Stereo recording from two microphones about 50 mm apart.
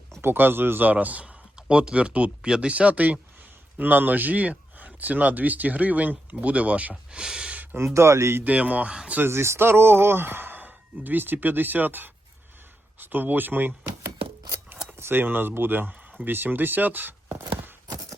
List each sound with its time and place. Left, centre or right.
0.2 s speech: right
7.1 s speech: centre
7.5 s a sound: right
7.9 s speech: right
8.4 s speech: right
9.2 s speech: right
14.9 s speech: right